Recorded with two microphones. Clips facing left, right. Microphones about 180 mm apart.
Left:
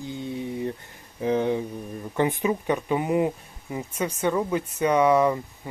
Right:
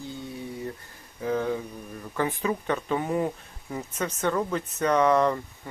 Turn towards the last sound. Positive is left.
turn(degrees=10)  # may be behind; listen again after turning